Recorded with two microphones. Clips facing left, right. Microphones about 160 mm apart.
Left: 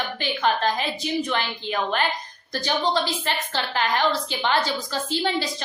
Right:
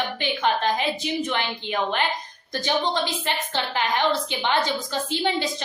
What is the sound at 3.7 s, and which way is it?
A woman's voice, 20° right (ahead or behind).